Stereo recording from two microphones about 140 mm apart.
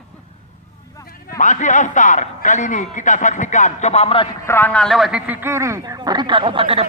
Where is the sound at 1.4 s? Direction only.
65° left (ahead or behind); by 4.3 s 45° left (ahead or behind).